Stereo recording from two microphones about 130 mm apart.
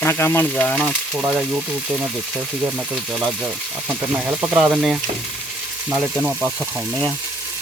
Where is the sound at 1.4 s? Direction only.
15° right (ahead or behind).